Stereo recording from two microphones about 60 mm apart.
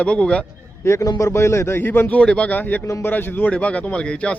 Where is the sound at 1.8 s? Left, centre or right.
Left.